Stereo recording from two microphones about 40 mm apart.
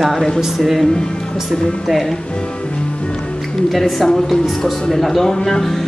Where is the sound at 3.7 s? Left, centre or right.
Centre.